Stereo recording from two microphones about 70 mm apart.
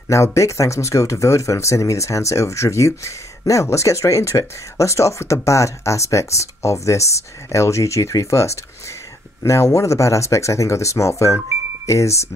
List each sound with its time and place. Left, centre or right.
0.1 s speech: left